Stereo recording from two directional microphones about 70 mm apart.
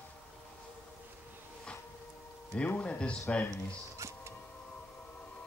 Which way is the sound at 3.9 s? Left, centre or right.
Right.